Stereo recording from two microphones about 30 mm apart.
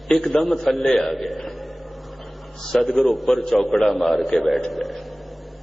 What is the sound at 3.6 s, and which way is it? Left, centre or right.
Speech, centre.